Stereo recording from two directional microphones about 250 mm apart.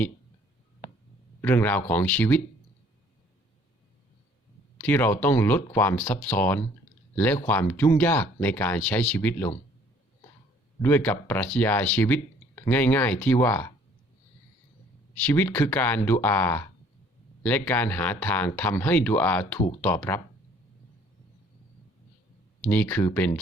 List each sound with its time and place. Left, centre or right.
1.4 s speech: centre
4.8 s speech: centre
10.8 s speech: centre
15.3 s speech: centre
22.6 s speech: centre